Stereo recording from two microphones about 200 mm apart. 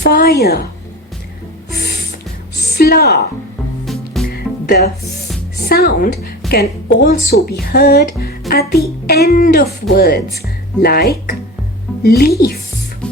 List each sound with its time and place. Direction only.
0.0 s speech: 50° left (ahead or behind)
2.7 s a sound: 50° left (ahead or behind)
3.8 s music: centre (ahead or behind)
4.3 s music: 50° left (ahead or behind)
5.6 s speech: 50° left (ahead or behind)